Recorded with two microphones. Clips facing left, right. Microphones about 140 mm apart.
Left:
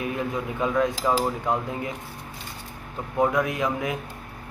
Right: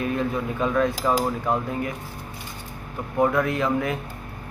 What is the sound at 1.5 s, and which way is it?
Speech, 20° left (ahead or behind).